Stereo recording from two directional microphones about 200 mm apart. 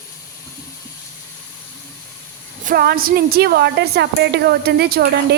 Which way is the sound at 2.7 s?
50° right (ahead or behind).